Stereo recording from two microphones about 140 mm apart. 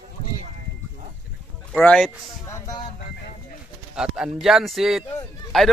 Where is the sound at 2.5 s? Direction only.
20° left (ahead or behind).